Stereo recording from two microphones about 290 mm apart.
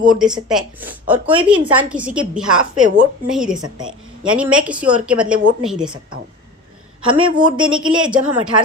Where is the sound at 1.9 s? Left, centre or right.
Centre.